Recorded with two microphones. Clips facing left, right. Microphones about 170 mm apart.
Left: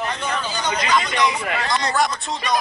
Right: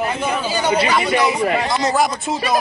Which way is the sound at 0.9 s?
10° right (ahead or behind).